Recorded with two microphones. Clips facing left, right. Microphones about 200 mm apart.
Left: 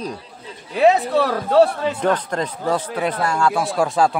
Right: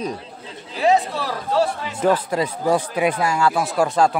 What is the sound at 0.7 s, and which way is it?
Speech, 60° left (ahead or behind).